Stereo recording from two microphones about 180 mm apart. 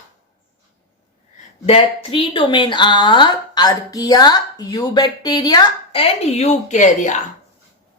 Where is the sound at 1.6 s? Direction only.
30° left (ahead or behind).